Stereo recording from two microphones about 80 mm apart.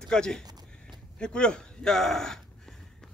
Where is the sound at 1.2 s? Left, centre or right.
Centre.